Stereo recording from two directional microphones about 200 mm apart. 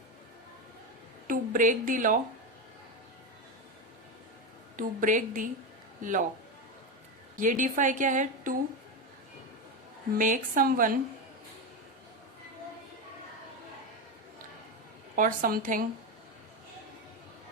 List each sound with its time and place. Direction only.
1.3 s a woman's voice: 40° right (ahead or behind)
4.8 s a woman's voice: 40° right (ahead or behind)
7.3 s a woman's voice: 40° right (ahead or behind)
10.2 s speech: 40° right (ahead or behind)
15.1 s speech: 45° right (ahead or behind)